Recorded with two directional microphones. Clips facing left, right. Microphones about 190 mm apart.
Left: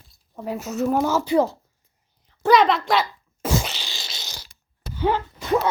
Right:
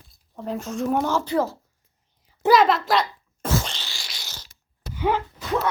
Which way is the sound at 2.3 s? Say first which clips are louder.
Even; 5° right (ahead or behind).